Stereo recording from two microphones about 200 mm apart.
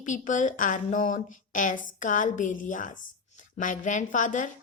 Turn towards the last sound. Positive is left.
turn(degrees=40)  # may be behind; listen again after turning